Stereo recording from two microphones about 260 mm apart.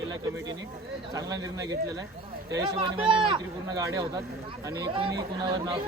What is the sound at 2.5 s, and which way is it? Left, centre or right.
Speech, centre.